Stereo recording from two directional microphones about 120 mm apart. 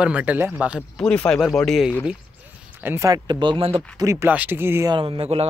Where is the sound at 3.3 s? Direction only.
40° right (ahead or behind).